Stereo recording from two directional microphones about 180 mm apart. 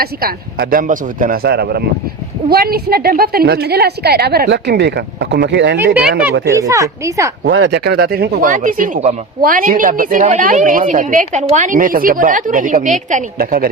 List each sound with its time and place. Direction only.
0.0 s a woman's voice: 55° right (ahead or behind); by 5.8 s 75° right (ahead or behind)
5.8 s speech: 10° right (ahead or behind)
7.5 s a woman's voice: 75° right (ahead or behind); by 13.7 s 55° right (ahead or behind)